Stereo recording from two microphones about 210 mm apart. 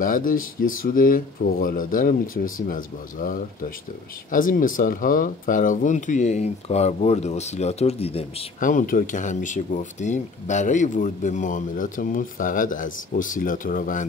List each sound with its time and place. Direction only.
0.0 s speech: 40° left (ahead or behind)
8.5 s speech: 40° left (ahead or behind)